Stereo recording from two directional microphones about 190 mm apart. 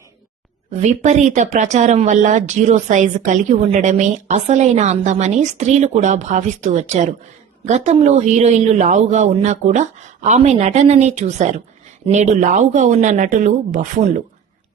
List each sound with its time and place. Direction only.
0.7 s speech: 35° right (ahead or behind)